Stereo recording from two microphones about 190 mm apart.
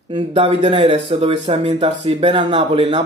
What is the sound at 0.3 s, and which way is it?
Speech, 30° right (ahead or behind).